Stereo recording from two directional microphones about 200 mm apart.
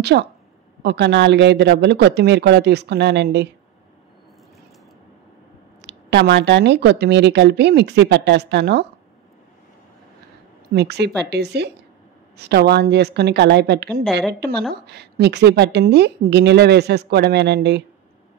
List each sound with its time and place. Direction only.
0.0 s a woman's voice: 55° right (ahead or behind)
5.9 s a woman's voice: 60° right (ahead or behind)
10.7 s a woman's voice: 55° right (ahead or behind)